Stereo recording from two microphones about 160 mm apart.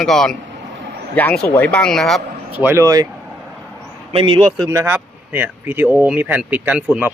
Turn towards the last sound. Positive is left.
turn(degrees=-5)  # may be behind; listen again after turning